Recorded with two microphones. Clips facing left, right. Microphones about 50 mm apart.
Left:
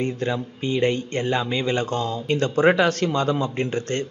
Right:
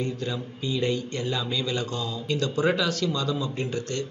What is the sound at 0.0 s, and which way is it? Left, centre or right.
A man's voice, left.